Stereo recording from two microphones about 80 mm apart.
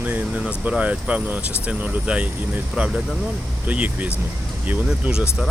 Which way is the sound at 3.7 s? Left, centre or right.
Centre.